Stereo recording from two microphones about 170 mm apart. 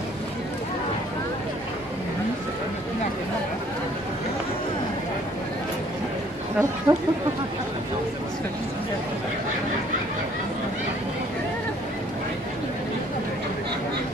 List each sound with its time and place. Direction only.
6.9 s speech: 20° right (ahead or behind)